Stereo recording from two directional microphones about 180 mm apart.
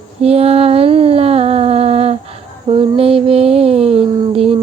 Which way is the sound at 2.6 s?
30° right (ahead or behind).